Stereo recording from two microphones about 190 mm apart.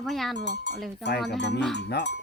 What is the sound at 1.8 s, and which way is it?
Speech, 60° left (ahead or behind).